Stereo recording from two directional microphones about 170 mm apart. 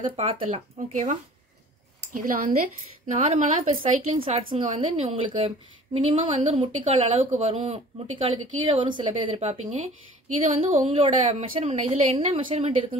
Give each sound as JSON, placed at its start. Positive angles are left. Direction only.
{"t": 0.1, "sound": "speech", "side_deg": -35}
{"t": 2.2, "sound": "a woman's voice", "side_deg": -50}
{"t": 4.2, "sound": "a woman's voice", "side_deg": -30}
{"t": 10.9, "sound": "speech", "side_deg": -35}